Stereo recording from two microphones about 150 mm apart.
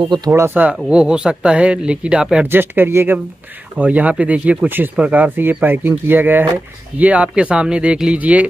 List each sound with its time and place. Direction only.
0.3 s speech: 10° right (ahead or behind)